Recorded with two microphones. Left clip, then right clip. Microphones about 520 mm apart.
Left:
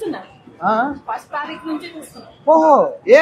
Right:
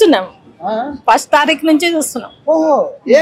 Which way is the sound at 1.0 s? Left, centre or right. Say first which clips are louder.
Right 15 dB; right.